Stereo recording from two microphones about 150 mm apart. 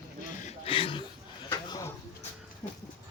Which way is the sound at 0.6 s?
35° left (ahead or behind).